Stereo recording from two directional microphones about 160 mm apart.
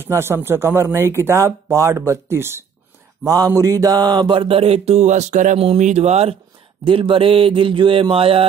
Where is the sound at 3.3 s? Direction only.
20° right (ahead or behind).